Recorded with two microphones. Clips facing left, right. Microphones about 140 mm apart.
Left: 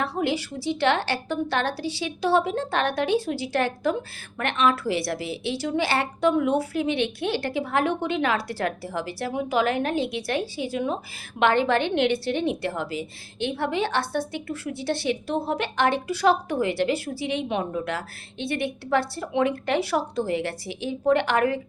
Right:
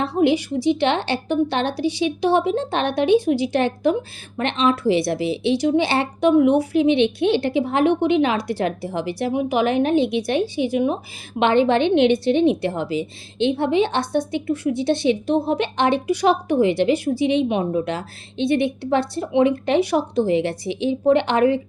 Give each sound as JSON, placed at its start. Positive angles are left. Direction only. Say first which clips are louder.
{"t": 0.2, "sound": "a woman's voice", "louder": "right 8 dB", "side_deg": -20}